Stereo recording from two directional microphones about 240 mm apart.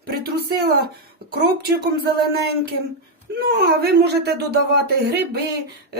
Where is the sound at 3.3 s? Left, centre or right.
Right.